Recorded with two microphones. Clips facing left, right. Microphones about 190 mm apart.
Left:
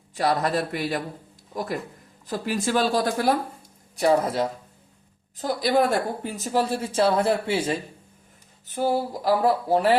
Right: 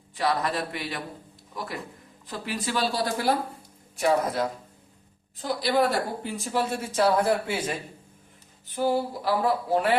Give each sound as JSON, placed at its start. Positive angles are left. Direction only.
{"t": 0.2, "sound": "speech", "side_deg": 45}
{"t": 2.2, "sound": "speech", "side_deg": 45}
{"t": 3.9, "sound": "speech", "side_deg": 30}
{"t": 5.4, "sound": "speech", "side_deg": 45}
{"t": 8.7, "sound": "speech", "side_deg": 45}